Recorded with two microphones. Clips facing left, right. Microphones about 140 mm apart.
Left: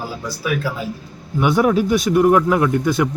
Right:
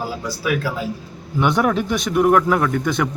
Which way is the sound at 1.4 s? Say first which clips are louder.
Left 2 dB; 5° left (ahead or behind).